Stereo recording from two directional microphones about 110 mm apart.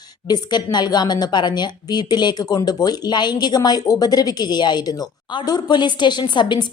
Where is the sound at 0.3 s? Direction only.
40° left (ahead or behind).